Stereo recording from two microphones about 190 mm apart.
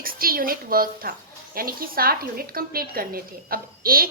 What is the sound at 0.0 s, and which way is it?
A woman's voice, 50° right (ahead or behind).